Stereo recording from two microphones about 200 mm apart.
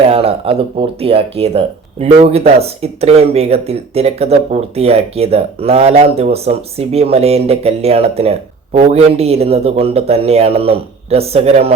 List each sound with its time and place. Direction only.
0.1 s speech: 30° right (ahead or behind)